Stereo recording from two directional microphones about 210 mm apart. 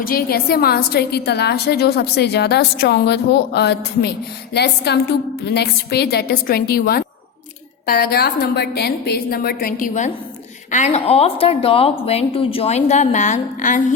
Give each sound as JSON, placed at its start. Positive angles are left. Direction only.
{"t": 0.0, "sound": "a woman's voice", "side_deg": 45}